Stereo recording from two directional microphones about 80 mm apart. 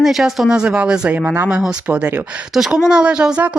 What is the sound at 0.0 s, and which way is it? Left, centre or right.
Speech, centre.